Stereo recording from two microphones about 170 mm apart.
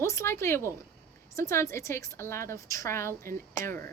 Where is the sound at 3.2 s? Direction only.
55° right (ahead or behind).